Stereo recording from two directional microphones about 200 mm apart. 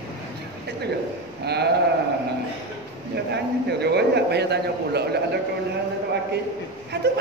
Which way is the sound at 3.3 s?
55° right (ahead or behind).